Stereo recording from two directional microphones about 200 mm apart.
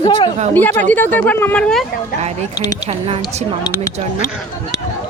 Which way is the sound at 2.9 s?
30° right (ahead or behind).